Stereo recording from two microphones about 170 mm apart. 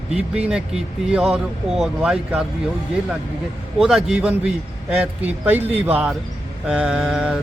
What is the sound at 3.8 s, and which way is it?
Speech, centre (ahead or behind).